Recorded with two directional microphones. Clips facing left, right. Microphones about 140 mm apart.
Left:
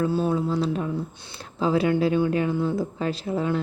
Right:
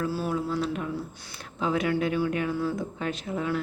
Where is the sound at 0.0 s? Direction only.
25° left (ahead or behind).